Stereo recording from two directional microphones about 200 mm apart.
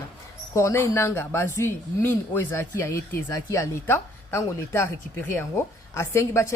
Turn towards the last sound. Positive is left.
turn(degrees=15)  # may be behind; listen again after turning